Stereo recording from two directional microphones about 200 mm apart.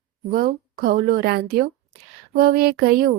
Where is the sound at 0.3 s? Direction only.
45° right (ahead or behind).